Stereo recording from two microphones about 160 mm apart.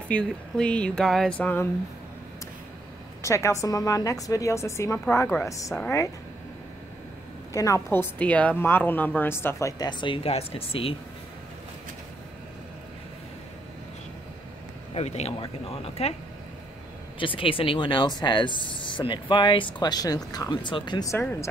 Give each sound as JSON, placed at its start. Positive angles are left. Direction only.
{"t": 0.1, "sound": "a woman's voice", "side_deg": 5}
{"t": 3.2, "sound": "a woman's voice", "side_deg": 20}
{"t": 7.5, "sound": "a woman's voice", "side_deg": 20}
{"t": 15.0, "sound": "speech", "side_deg": 40}
{"t": 17.2, "sound": "a woman's voice", "side_deg": 35}
{"t": 21.1, "sound": "a woman's voice", "side_deg": 15}